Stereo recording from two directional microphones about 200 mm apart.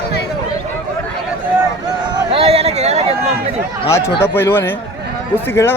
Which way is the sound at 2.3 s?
30° right (ahead or behind).